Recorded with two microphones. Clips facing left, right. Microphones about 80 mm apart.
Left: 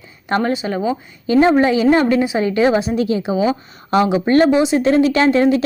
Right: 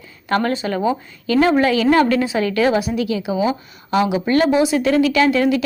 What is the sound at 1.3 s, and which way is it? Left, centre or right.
A woman's voice, left.